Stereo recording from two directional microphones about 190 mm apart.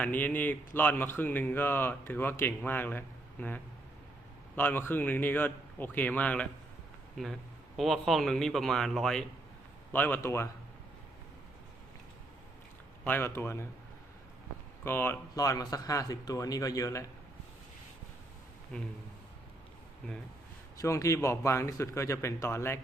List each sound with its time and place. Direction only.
0.0 s speech: 10° left (ahead or behind)
13.1 s speech: 10° left (ahead or behind)
14.8 s speech: 10° left (ahead or behind)
18.7 s speech: 5° left (ahead or behind)
20.8 s speech: 15° left (ahead or behind)